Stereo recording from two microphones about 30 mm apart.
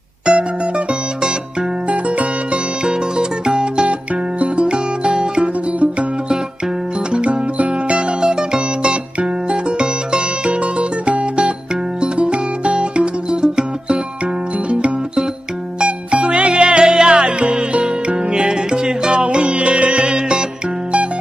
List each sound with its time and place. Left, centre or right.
0.3 s mandolin: right
1.9 s music: right
2.8 s music: right
4.1 s music: right
14.7 s music: right
16.1 s music: right